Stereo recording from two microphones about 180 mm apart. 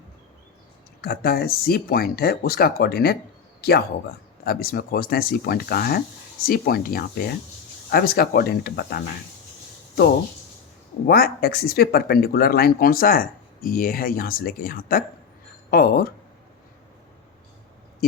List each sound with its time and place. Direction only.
1.0 s speech: 60° left (ahead or behind)
11.0 s speech: 55° left (ahead or behind)